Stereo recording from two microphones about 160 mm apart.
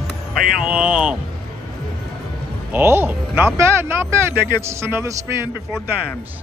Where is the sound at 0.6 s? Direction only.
5° right (ahead or behind).